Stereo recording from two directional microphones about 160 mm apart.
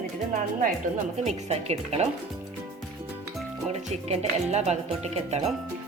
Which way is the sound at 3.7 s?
40° right (ahead or behind).